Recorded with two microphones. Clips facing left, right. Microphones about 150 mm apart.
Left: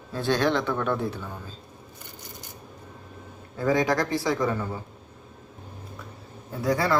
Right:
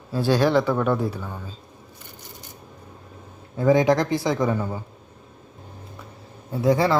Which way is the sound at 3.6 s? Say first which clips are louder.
Right 5 dB; 20° right (ahead or behind).